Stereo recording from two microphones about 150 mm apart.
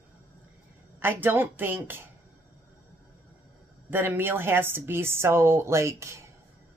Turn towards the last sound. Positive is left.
turn(degrees=-20)  # may be behind; listen again after turning